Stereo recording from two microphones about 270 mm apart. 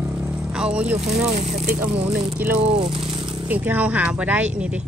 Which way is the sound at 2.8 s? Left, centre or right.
Centre.